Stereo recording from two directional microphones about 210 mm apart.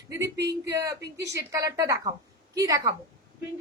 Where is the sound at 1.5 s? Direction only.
15° right (ahead or behind).